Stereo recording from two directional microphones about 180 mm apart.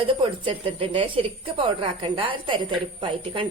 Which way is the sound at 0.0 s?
30° right (ahead or behind).